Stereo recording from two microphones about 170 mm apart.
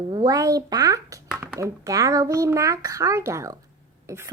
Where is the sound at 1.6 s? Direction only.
20° right (ahead or behind).